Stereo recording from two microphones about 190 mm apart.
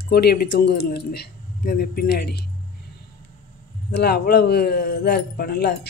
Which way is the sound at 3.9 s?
60° left (ahead or behind).